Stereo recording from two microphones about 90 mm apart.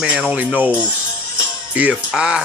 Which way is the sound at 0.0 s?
10° right (ahead or behind).